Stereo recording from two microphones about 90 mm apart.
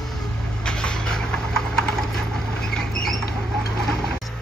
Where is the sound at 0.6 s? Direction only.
10° left (ahead or behind).